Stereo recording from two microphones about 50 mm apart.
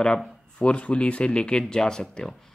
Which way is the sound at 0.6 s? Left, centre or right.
Left.